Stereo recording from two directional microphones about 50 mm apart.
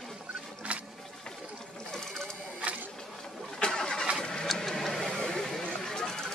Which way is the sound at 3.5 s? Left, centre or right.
Centre.